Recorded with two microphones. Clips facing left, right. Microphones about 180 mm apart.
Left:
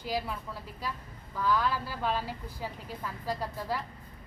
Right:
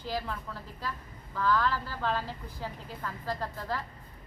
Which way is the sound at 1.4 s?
10° left (ahead or behind).